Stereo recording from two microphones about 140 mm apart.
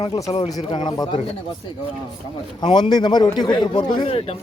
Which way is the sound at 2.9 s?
30° left (ahead or behind).